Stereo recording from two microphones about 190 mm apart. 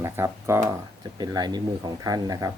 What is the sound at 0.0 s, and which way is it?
Speech, 15° right (ahead or behind).